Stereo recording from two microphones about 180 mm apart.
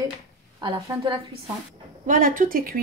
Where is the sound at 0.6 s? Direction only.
25° right (ahead or behind).